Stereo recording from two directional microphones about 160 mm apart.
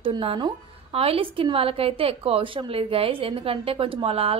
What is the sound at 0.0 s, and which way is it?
A woman's voice, 35° right (ahead or behind).